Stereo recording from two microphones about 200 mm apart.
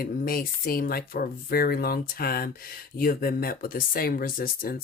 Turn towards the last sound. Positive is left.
turn(degrees=45)  # may be behind; listen again after turning